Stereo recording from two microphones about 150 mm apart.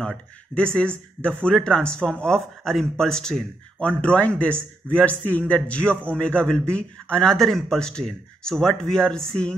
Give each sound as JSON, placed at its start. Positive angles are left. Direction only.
{"t": 0.0, "sound": "a man's voice", "side_deg": 5}